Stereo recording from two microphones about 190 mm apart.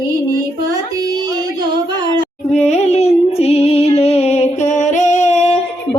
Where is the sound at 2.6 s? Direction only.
35° left (ahead or behind).